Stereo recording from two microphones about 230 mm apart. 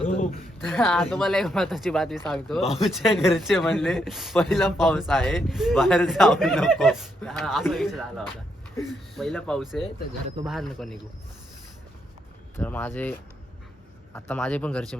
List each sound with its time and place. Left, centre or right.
0.0 s a sound: left
0.7 s speech: centre
12.5 s speech: centre